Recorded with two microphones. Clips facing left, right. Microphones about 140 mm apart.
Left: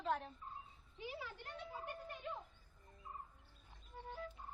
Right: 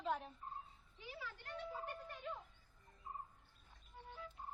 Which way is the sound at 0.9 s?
20° left (ahead or behind).